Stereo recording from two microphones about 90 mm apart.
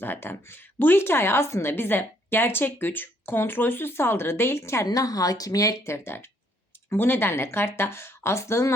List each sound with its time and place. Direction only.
0.0 s a woman's voice: 25° left (ahead or behind)
4.9 s a woman's voice: 40° left (ahead or behind)